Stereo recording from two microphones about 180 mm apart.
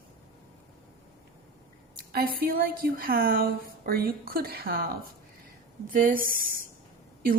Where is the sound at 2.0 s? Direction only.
55° right (ahead or behind).